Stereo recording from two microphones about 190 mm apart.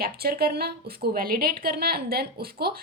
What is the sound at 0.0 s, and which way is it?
A woman's voice, 55° right (ahead or behind).